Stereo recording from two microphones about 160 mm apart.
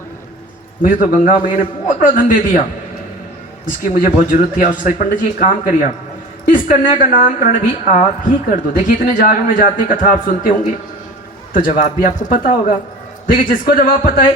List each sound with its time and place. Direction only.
0.8 s speech: 60° left (ahead or behind)
3.8 s speech: 60° left (ahead or behind)